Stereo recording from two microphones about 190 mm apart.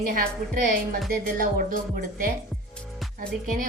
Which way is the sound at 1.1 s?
50° right (ahead or behind).